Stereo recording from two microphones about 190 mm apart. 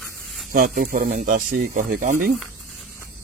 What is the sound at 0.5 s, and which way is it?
Speech, 50° right (ahead or behind).